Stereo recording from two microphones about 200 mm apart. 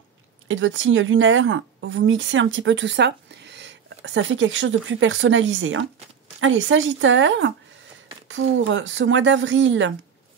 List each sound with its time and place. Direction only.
0.5 s speech: 75° right (ahead or behind)